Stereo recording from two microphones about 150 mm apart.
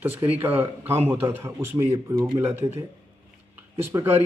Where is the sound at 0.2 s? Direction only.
10° right (ahead or behind).